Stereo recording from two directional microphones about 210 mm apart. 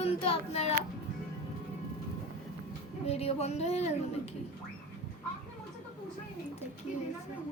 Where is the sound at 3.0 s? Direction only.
30° left (ahead or behind).